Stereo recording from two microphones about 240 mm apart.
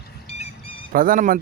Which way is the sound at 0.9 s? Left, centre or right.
Right.